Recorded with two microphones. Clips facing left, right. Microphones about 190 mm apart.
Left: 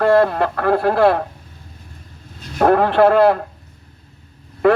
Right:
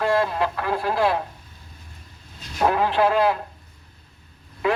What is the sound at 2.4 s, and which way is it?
Speech, 55° left (ahead or behind).